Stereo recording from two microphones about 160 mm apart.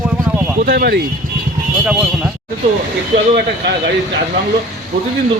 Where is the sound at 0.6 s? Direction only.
70° right (ahead or behind).